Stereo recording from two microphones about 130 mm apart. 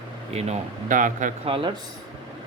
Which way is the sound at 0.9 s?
90° right.